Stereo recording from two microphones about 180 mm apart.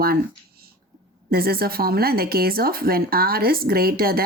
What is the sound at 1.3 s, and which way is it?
Speech, 60° right (ahead or behind).